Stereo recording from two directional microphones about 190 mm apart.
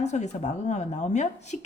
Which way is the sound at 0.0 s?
35° left (ahead or behind).